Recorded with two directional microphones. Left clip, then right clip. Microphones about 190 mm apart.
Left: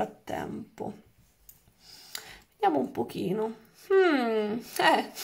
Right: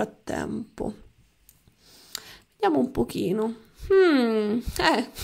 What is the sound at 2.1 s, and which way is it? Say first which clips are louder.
Speech: right 3 dB; 25° right (ahead or behind).